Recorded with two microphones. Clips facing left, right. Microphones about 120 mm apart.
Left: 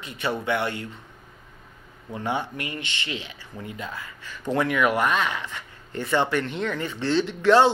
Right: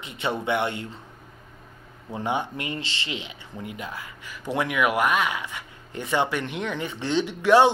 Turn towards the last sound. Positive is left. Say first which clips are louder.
# even
turn(degrees=-15)  # may be behind; listen again after turning